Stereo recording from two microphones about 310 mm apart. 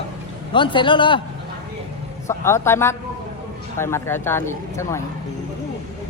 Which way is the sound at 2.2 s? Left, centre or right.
Centre.